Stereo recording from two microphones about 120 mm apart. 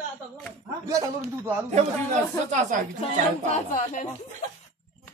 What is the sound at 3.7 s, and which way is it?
Speech, 90° left.